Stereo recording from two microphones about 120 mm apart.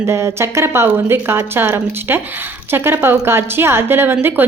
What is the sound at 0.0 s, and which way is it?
A woman's voice, 20° right (ahead or behind).